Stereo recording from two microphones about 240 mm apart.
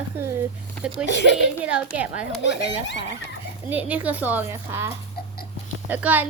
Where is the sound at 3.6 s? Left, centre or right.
Centre.